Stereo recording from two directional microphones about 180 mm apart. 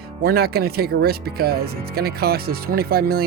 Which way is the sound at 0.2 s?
60° right (ahead or behind).